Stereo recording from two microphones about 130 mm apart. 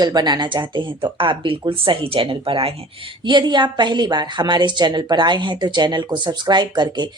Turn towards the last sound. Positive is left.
turn(degrees=-35)  # may be behind; listen again after turning